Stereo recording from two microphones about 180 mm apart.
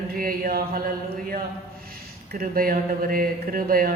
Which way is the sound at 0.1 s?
55° right (ahead or behind).